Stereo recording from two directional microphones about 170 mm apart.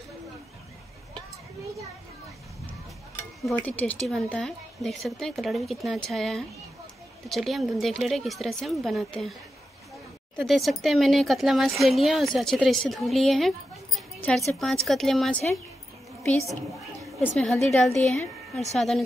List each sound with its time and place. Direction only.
3.4 s speech: 10° left (ahead or behind)
10.4 s speech: centre (ahead or behind)
17.2 s speech: 10° left (ahead or behind)